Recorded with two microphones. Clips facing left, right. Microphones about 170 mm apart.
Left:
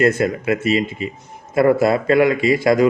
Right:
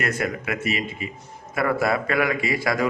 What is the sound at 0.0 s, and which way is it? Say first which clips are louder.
A man's voice: left 9 dB; 25° left (ahead or behind).